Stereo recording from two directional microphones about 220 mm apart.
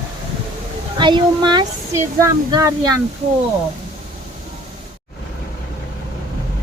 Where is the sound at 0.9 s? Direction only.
20° right (ahead or behind).